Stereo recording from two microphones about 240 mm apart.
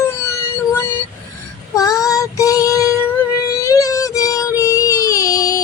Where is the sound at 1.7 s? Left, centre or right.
Centre.